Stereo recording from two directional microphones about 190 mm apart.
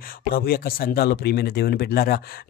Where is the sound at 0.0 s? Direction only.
50° left (ahead or behind).